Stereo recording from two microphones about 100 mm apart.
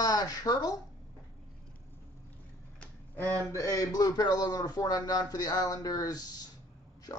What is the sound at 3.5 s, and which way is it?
Speech, 35° left (ahead or behind).